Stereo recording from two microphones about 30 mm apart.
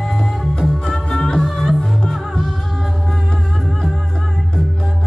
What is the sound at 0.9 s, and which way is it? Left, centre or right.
Music, centre.